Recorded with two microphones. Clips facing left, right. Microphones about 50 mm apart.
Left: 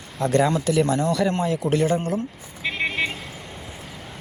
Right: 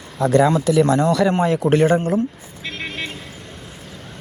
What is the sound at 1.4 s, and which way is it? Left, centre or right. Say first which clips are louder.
Speech: right 5 dB; right.